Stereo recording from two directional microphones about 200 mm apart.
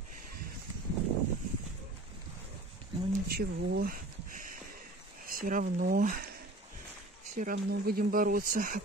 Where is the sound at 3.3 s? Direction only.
50° right (ahead or behind).